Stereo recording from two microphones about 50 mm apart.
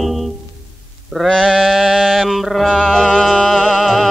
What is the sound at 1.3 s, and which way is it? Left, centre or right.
Music, centre.